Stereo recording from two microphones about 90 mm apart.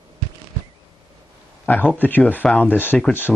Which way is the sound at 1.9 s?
20° left (ahead or behind).